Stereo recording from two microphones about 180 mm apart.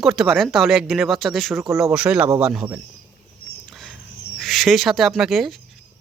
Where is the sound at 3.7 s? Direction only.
Centre (ahead or behind).